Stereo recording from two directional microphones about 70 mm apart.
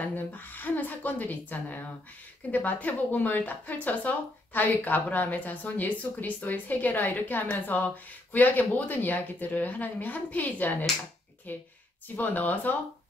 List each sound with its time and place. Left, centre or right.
0.0 s a woman's voice: left
12.2 s a woman's voice: left